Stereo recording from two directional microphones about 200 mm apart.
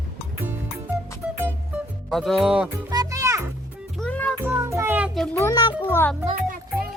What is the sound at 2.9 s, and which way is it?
Music, 15° right (ahead or behind).